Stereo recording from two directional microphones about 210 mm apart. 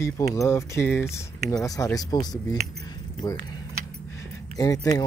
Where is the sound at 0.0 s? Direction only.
15° left (ahead or behind).